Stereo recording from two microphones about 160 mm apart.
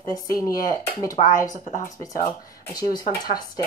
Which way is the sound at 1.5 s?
50° left (ahead or behind).